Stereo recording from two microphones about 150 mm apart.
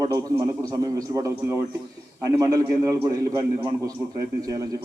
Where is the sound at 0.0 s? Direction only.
25° right (ahead or behind).